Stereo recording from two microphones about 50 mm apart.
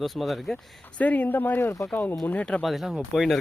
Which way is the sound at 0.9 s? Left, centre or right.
Left.